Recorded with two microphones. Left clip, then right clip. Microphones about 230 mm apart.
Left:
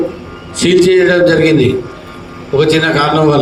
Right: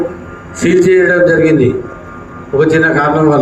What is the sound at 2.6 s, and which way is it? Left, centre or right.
Speech, left.